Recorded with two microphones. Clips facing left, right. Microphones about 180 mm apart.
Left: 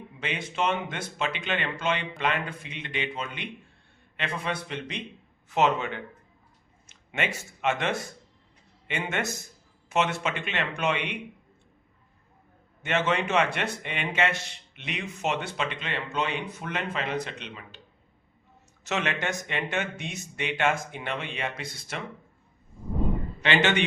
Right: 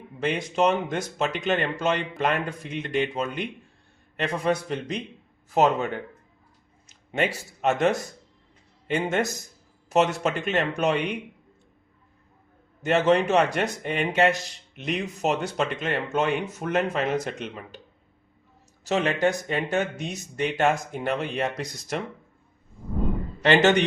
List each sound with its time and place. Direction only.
0.2 s a man's voice: 40° right (ahead or behind)
12.8 s a man's voice: 40° right (ahead or behind)
18.9 s a man's voice: 35° right (ahead or behind)
23.4 s a man's voice: 40° right (ahead or behind)